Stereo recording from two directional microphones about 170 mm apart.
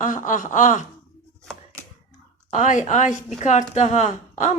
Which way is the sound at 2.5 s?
45° left (ahead or behind).